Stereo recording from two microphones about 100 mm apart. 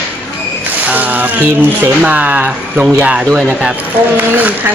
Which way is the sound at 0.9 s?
15° right (ahead or behind).